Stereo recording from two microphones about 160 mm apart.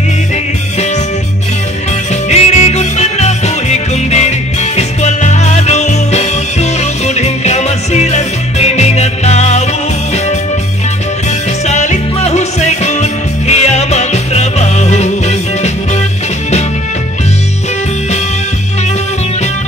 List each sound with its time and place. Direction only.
2.2 s music: 45° left (ahead or behind)
11.6 s music: 45° left (ahead or behind)